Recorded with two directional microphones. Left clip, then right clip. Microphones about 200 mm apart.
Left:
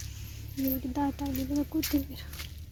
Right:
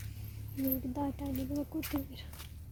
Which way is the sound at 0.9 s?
25° left (ahead or behind).